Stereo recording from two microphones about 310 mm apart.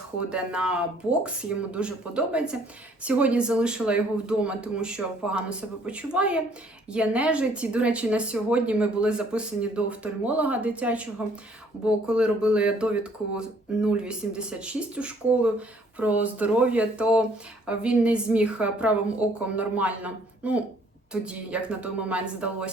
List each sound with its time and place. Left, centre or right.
0.3 s a woman's voice: centre